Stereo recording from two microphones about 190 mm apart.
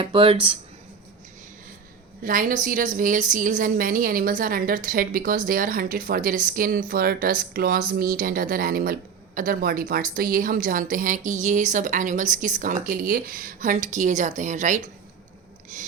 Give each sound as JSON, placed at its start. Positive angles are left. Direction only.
{"t": 0.0, "sound": "speech", "side_deg": -25}
{"t": 2.2, "sound": "a woman's voice", "side_deg": -45}
{"t": 15.7, "sound": "filing", "side_deg": -40}